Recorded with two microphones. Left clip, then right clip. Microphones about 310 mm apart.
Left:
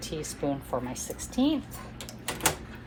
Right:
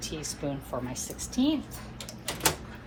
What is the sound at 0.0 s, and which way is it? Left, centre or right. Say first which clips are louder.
A woman's voice: left 2 dB; left.